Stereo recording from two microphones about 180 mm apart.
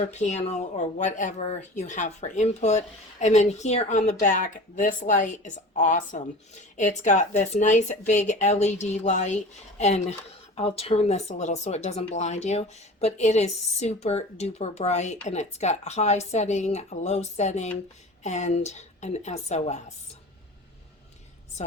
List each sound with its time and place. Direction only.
0.1 s speech: 40° left (ahead or behind)